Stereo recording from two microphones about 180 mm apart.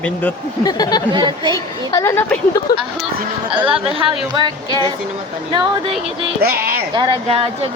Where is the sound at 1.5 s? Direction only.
20° left (ahead or behind).